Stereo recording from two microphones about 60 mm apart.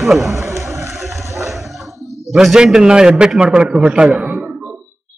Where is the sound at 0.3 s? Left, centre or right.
Right.